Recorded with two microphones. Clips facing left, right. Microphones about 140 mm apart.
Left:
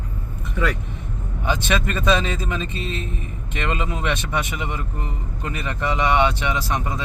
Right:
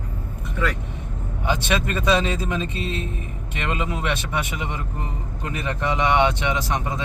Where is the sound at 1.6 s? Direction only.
15° right (ahead or behind).